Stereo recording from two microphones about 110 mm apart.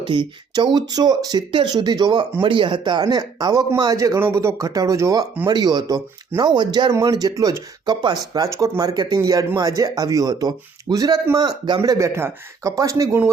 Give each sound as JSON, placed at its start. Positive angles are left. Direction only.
{"t": 0.0, "sound": "speech", "side_deg": -45}
{"t": 5.5, "sound": "speech", "side_deg": -40}
{"t": 11.8, "sound": "speech", "side_deg": -30}